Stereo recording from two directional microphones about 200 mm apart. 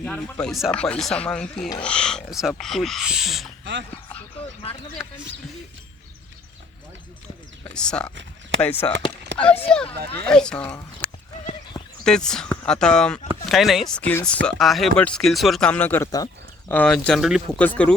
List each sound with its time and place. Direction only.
0.0 s speech: 5° left (ahead or behind)
3.6 s speech: 60° right (ahead or behind)
7.6 s speech: 5° left (ahead or behind)